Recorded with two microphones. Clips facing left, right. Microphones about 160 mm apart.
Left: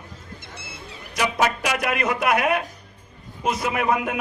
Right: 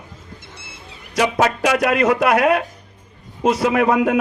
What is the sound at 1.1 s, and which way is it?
A man's voice, 30° right (ahead or behind).